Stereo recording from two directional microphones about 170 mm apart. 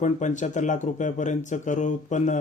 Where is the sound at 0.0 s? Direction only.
45° left (ahead or behind).